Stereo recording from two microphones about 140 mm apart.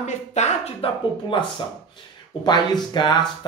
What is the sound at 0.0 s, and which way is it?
Speech, 55° left (ahead or behind).